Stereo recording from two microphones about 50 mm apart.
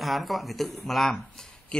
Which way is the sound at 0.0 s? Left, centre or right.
Centre.